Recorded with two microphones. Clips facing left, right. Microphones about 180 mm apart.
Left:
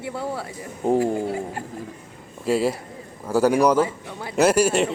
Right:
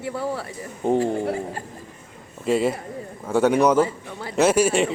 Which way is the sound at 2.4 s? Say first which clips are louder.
Even; 5° left (ahead or behind).